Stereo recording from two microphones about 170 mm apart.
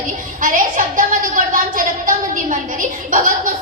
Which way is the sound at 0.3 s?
50° right (ahead or behind).